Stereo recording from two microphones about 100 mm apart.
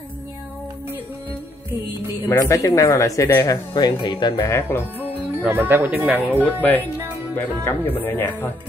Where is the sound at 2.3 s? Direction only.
35° left (ahead or behind).